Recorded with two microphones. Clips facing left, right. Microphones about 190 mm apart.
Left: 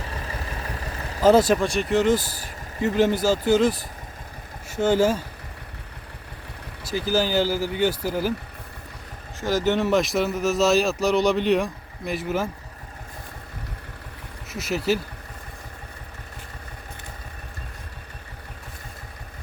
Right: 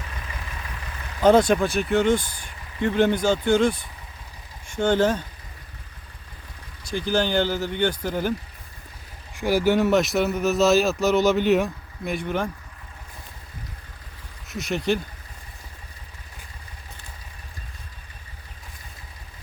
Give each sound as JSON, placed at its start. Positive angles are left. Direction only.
{"t": 0.1, "sound": "vehicle", "side_deg": 40}
{"t": 1.2, "sound": "speech", "side_deg": 5}
{"t": 6.8, "sound": "speech", "side_deg": 5}
{"t": 9.4, "sound": "speech", "side_deg": -10}
{"t": 14.4, "sound": "speech", "side_deg": 0}